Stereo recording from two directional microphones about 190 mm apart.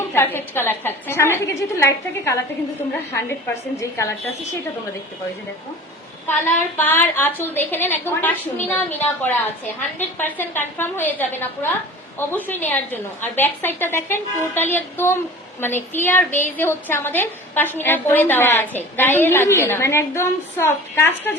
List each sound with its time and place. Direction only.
0.1 s a woman's voice: 10° left (ahead or behind)
6.7 s a woman's voice: 10° left (ahead or behind)